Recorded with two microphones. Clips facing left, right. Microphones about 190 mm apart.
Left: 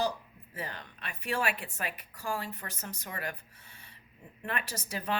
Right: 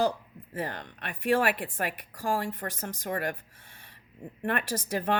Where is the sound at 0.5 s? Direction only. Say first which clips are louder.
Right 7 dB; 50° right (ahead or behind).